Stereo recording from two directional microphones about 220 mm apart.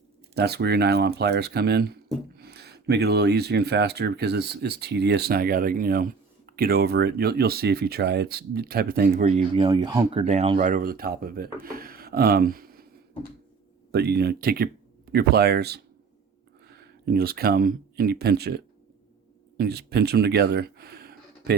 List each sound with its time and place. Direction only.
0.3 s speech: 50° right (ahead or behind)
9.3 s speech: 25° right (ahead or behind)
10.1 s speech: 25° right (ahead or behind)
10.6 s speech: 35° right (ahead or behind)
11.6 s wood: 40° right (ahead or behind)
13.9 s speech: 45° right (ahead or behind)